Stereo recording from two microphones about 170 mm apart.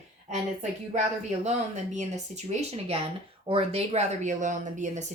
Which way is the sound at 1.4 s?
45° right (ahead or behind).